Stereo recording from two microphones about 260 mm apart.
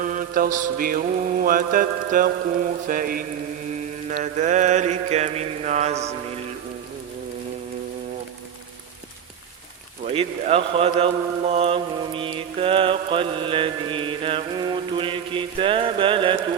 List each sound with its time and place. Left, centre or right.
0.0 s mantra: right
4.1 s speech: right
10.2 s speech: right